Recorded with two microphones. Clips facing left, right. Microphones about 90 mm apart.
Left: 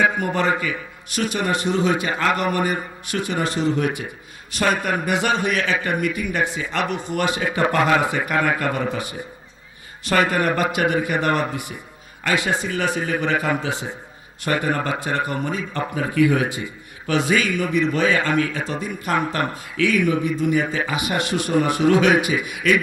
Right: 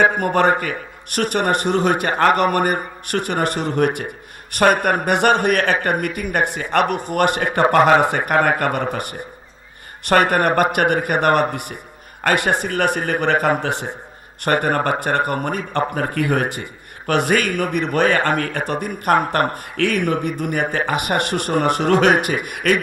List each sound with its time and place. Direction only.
0.0 s a man's voice: 55° right (ahead or behind)
7.7 s a man's voice: 45° right (ahead or behind)